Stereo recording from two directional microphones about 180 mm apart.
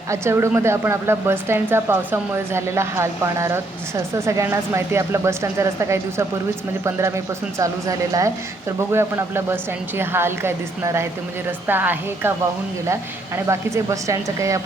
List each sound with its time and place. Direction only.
0.1 s a woman's voice: 15° right (ahead or behind)
7.6 s a woman's voice: 20° right (ahead or behind)